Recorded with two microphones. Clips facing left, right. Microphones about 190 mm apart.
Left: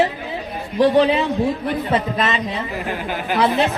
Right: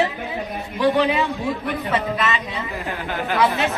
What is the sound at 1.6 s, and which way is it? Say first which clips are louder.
A woman's voice: left 3 dB; 35° left (ahead or behind).